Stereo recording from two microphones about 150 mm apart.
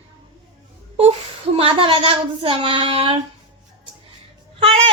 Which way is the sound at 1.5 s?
35° right (ahead or behind).